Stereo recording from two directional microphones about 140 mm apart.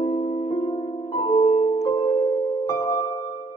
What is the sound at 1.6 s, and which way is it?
Music, 45° left (ahead or behind).